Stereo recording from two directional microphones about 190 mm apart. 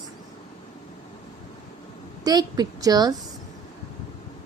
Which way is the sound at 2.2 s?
20° right (ahead or behind).